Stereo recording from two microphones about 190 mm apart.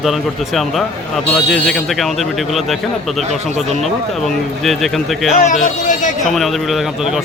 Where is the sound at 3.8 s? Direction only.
Centre (ahead or behind).